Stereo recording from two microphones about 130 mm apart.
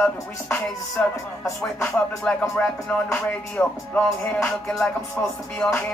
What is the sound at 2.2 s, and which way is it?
Music, 10° left (ahead or behind).